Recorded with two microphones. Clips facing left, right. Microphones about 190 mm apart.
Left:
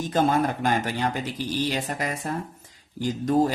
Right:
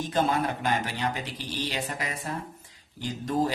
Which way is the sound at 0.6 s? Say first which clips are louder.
Left 4 dB; 45° left (ahead or behind).